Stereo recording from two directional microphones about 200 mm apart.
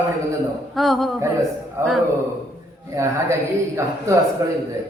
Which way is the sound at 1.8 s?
15° right (ahead or behind).